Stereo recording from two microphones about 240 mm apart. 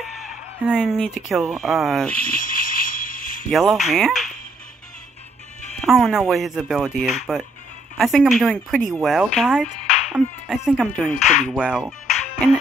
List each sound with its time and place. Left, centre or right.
0.0 s speech: centre
2.3 s jingle bell: left
3.4 s speech: centre
5.8 s speech: centre